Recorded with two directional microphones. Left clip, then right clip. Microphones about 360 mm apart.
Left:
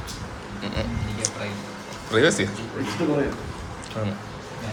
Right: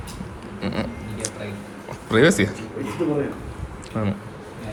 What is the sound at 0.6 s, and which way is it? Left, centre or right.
Speech, centre.